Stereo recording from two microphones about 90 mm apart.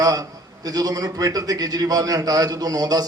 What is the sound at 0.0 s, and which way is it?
A man's voice, 45° right (ahead or behind).